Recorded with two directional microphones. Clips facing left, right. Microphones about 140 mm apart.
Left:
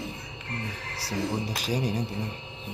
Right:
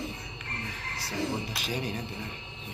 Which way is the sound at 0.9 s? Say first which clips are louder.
Left 2 dB; 35° left (ahead or behind).